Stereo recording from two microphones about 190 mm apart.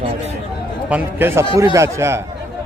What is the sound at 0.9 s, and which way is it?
A man's voice, 10° right (ahead or behind).